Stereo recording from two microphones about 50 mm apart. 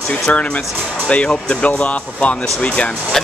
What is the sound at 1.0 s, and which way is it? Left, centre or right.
Speech, left.